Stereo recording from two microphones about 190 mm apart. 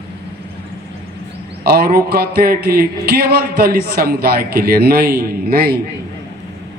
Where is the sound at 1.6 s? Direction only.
55° right (ahead or behind).